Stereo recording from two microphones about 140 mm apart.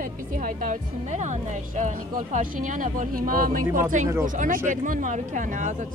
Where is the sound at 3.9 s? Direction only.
65° right (ahead or behind).